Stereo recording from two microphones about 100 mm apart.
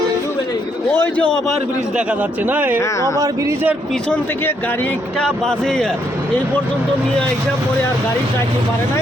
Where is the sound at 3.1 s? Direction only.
35° right (ahead or behind).